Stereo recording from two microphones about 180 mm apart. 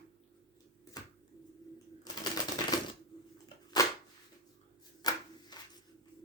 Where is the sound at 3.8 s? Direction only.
20° left (ahead or behind).